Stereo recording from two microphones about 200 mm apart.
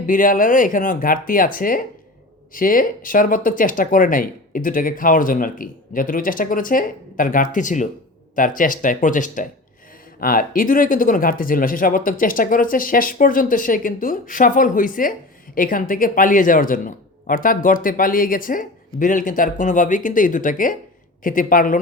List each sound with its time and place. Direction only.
0.0 s speech: 45° left (ahead or behind)